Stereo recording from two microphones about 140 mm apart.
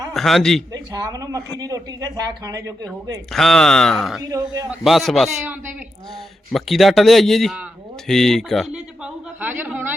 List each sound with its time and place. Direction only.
0.1 s a man's voice: centre (ahead or behind)
0.7 s speech: 25° right (ahead or behind)
3.3 s speech: 5° left (ahead or behind)
4.2 s speech: 25° right (ahead or behind)
4.7 s speech: centre (ahead or behind)
6.5 s speech: centre (ahead or behind)
8.0 s a sound: 5° left (ahead or behind); by 9.9 s 15° right (ahead or behind)